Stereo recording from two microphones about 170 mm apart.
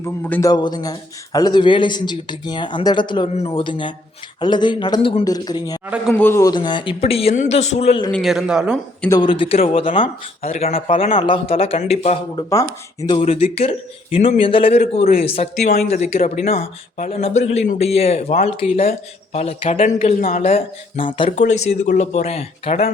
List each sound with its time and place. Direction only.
0.0 s a man's voice: 15° left (ahead or behind)
0.5 s speech: 25° left (ahead or behind)
8.1 s speech: centre (ahead or behind)
9.0 s speech: 25° left (ahead or behind)
13.2 s speech: 40° left (ahead or behind)
21.0 s speech: 30° left (ahead or behind)
21.3 s speech: 45° left (ahead or behind)